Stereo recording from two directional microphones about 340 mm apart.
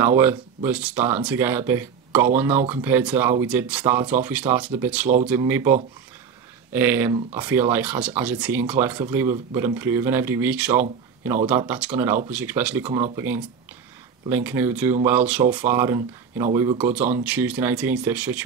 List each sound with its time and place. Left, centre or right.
0.0 s speech: centre